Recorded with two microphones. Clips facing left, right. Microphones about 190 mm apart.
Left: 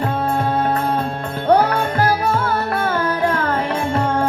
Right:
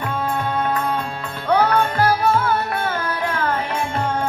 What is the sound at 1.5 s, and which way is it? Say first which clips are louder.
Music: left 2 dB; 40° left (ahead or behind).